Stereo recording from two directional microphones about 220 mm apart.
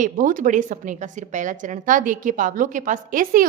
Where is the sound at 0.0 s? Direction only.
35° right (ahead or behind).